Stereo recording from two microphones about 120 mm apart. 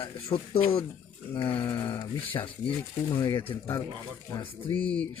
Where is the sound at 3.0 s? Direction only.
40° left (ahead or behind).